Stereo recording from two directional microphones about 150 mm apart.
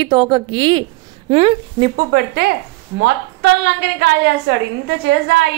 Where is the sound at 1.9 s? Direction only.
90° right.